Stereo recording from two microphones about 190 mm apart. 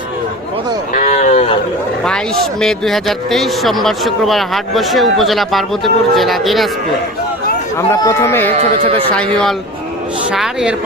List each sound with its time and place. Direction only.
0.9 s a sound: 35° left (ahead or behind)
2.0 s speech: centre (ahead or behind)
7.9 s speech: 15° left (ahead or behind)
8.4 s speech: 30° right (ahead or behind)
10.3 s speech: 5° right (ahead or behind)